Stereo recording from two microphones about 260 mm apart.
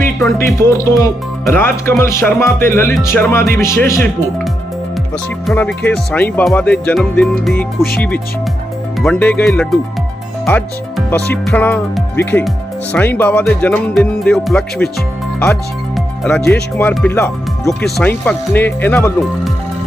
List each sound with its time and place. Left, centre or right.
0.0 s music: centre
1.5 s speech: centre
5.5 s speech: centre
7.8 s music: left
9.0 s speech: centre
16.0 s music: centre
16.7 s speech: centre